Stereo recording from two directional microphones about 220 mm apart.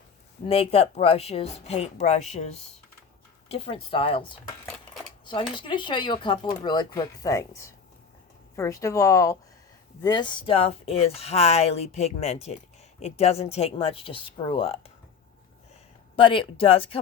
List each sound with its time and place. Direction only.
0.4 s speech: 25° left (ahead or behind)
5.2 s a sound: 20° left (ahead or behind)
5.5 s speech: 20° left (ahead or behind)
16.1 s speech: 25° left (ahead or behind)